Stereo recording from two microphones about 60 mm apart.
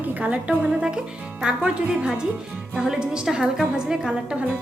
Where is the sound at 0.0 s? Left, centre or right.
Right.